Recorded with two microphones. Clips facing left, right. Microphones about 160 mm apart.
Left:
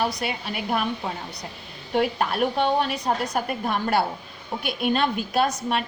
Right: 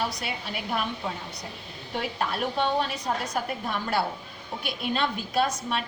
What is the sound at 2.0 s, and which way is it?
A woman's voice, 60° left (ahead or behind).